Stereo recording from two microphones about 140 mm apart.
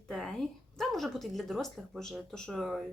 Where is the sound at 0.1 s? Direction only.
5° left (ahead or behind).